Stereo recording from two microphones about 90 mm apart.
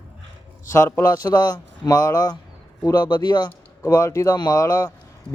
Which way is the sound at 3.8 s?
40° left (ahead or behind).